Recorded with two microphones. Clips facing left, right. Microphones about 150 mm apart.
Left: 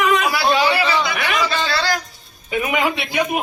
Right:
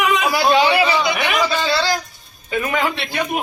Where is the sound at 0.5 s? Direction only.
20° right (ahead or behind).